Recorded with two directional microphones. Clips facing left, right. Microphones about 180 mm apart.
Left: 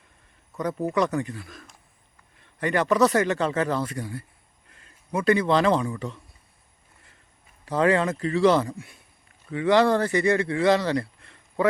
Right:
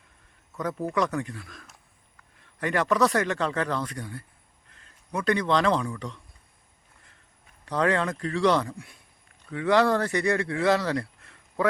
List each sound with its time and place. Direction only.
0.6 s speech: centre (ahead or behind)
7.6 s speech: 5° left (ahead or behind)